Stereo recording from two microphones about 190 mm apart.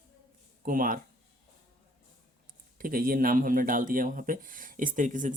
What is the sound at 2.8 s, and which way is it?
Speech, 50° right (ahead or behind).